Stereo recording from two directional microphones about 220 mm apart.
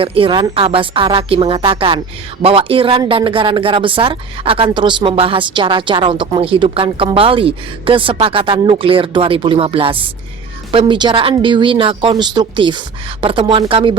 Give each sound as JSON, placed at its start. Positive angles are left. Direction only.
{"t": 0.0, "sound": "speech", "side_deg": -25}